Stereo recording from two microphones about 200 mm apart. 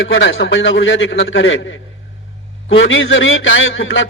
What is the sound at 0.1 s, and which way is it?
A man's voice, 70° left (ahead or behind).